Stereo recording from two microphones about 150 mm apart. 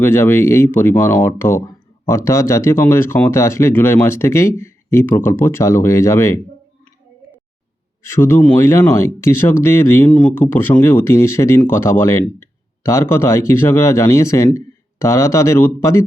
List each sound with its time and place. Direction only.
0.0 s speech: 15° left (ahead or behind)
8.0 s speech: 15° left (ahead or behind)